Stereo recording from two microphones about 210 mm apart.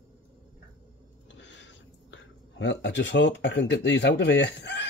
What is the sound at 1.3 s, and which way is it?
Speech, 60° left (ahead or behind).